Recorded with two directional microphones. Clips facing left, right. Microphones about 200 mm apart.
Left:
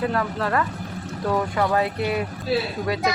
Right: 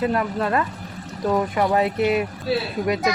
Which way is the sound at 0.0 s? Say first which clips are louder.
Right 2 dB; 20° right (ahead or behind).